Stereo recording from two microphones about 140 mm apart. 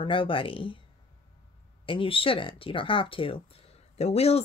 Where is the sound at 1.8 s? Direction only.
40° left (ahead or behind).